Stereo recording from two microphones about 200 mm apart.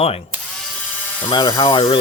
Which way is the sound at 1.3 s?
20° left (ahead or behind).